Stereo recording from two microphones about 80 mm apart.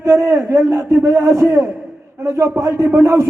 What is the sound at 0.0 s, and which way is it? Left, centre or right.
A man's voice, right.